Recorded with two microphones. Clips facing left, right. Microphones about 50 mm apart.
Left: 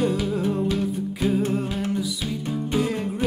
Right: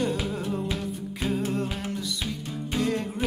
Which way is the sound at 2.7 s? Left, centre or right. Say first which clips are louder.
Left 2 dB; centre.